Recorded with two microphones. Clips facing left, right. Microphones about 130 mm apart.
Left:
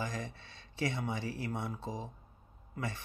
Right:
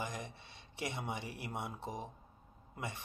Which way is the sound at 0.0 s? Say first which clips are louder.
Left 3 dB; 20° right (ahead or behind).